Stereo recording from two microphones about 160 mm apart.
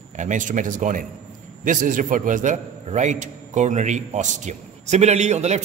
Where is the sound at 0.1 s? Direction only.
50° right (ahead or behind).